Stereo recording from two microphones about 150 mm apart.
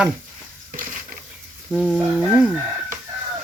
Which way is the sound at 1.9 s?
10° right (ahead or behind).